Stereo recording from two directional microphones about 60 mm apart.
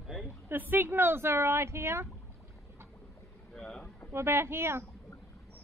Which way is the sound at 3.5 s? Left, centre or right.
Centre.